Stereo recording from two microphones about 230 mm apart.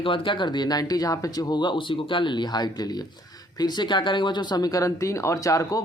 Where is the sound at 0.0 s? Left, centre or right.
Left.